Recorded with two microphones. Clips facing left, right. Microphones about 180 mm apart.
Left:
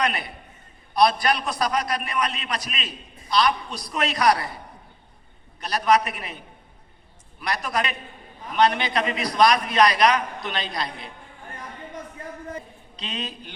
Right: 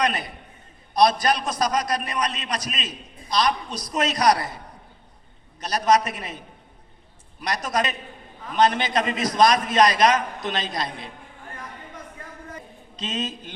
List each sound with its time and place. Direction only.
0.0 s a man's voice: 40° right (ahead or behind)
5.5 s a man's voice: 40° right (ahead or behind)
7.4 s a man's voice: 40° right (ahead or behind)
13.0 s a man's voice: 45° right (ahead or behind)